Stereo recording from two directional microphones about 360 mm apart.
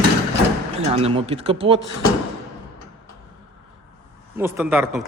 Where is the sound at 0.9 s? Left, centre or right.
Centre.